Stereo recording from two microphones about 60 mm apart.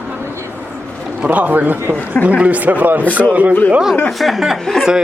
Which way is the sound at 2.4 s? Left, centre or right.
Right.